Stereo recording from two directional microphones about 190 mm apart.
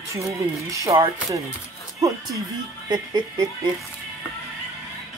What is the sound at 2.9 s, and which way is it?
Speech, 20° right (ahead or behind).